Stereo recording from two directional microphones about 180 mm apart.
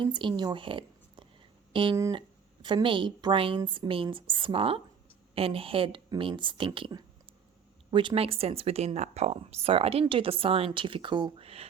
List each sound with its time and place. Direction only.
0.0 s speech: 25° right (ahead or behind)